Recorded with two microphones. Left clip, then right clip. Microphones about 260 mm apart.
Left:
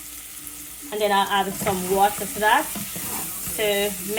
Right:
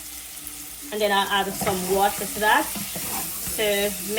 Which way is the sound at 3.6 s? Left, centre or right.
Left.